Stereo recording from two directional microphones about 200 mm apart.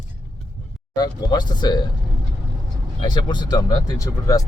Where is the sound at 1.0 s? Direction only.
20° left (ahead or behind).